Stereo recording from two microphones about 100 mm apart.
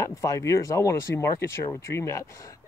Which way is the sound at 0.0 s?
35° left (ahead or behind).